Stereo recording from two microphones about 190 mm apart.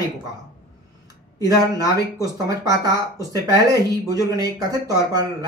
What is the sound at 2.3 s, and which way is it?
Speech, 20° right (ahead or behind).